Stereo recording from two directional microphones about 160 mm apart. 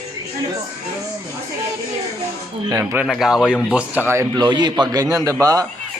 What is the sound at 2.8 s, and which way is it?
A man's voice, 10° right (ahead or behind).